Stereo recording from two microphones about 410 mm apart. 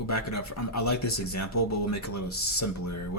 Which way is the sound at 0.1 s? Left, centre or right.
Left.